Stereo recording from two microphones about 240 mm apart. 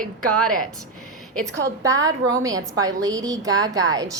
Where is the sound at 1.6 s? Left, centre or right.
Centre.